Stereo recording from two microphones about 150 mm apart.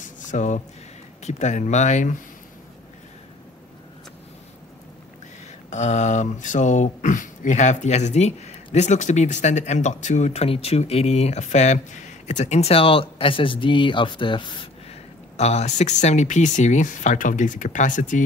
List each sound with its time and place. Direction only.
0.0 s a sound: 55° left (ahead or behind)
1.2 s speech: 50° left (ahead or behind)
5.7 s speech: 50° left (ahead or behind); by 14.7 s 35° left (ahead or behind)
15.3 s speech: 45° left (ahead or behind)